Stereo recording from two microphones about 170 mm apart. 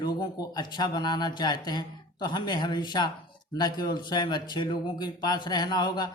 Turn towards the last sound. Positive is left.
turn(degrees=25)  # may be behind; listen again after turning